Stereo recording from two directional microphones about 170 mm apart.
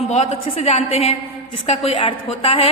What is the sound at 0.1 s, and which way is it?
A woman's voice, 35° left (ahead or behind).